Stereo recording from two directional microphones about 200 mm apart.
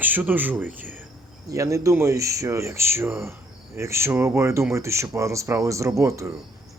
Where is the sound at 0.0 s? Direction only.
10° right (ahead or behind).